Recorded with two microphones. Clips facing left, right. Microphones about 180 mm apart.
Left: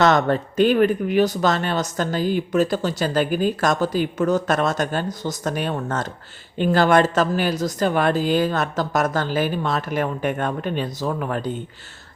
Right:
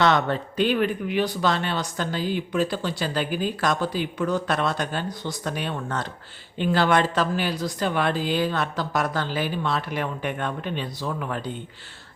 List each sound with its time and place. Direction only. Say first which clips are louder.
0.0 s speech: left 4 dB; 45° left (ahead or behind)